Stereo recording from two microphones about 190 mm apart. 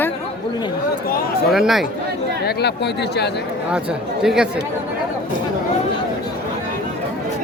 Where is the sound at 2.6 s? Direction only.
60° left (ahead or behind).